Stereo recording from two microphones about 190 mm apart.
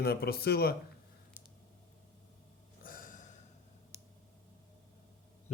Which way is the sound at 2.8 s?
45° left (ahead or behind).